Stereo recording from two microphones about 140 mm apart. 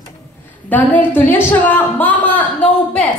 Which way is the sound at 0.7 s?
10° left (ahead or behind).